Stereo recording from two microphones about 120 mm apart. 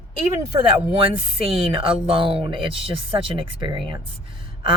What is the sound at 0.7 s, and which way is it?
Speech, 50° right (ahead or behind).